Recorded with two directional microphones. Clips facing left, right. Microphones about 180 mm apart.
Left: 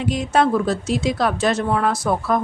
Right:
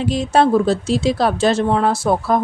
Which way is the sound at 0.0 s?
30° right (ahead or behind).